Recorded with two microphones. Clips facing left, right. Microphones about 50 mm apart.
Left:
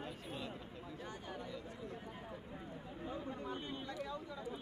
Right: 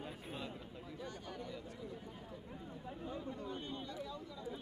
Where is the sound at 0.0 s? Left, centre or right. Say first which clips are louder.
Even; centre.